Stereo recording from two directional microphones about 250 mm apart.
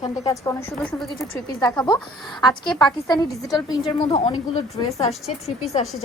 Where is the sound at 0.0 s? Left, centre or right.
Centre.